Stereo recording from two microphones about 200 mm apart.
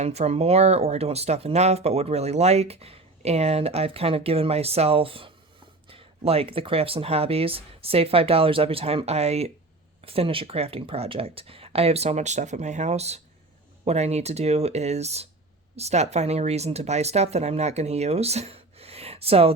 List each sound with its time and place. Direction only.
0.0 s speech: 30° right (ahead or behind)